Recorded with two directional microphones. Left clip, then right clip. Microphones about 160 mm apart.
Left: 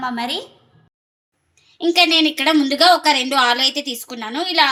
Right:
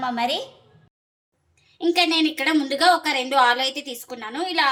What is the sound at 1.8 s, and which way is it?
A woman's voice, 40° left (ahead or behind).